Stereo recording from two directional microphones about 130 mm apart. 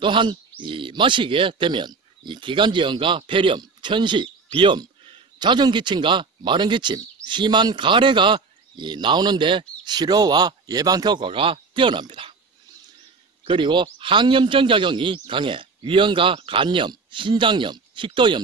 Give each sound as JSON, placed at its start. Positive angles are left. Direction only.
{"t": 0.0, "sound": "a man's voice", "side_deg": -40}
{"t": 13.5, "sound": "a man's voice", "side_deg": -35}